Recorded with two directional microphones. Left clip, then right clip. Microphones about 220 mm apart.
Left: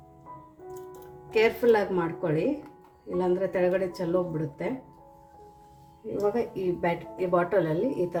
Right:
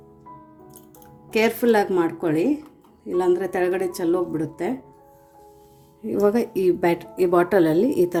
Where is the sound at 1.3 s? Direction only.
55° right (ahead or behind).